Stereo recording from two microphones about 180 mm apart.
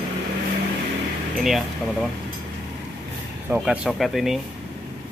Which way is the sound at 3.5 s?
5° right (ahead or behind).